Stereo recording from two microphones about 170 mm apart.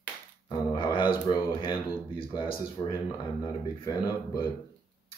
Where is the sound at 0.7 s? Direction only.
30° left (ahead or behind).